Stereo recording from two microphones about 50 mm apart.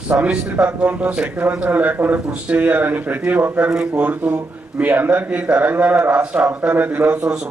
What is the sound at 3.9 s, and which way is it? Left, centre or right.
A man's voice, right.